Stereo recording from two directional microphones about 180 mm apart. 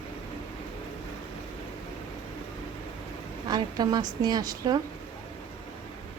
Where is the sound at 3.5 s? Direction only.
20° right (ahead or behind).